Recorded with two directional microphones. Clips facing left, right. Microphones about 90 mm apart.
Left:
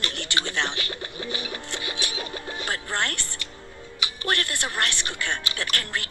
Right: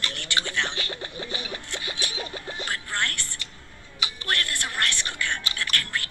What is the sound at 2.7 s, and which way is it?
Music, 25° left (ahead or behind).